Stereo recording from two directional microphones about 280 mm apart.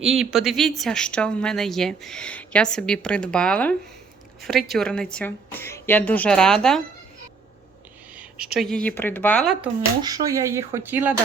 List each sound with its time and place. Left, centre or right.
0.0 s a woman's voice: centre
8.1 s a woman's voice: centre
10.0 s speech: centre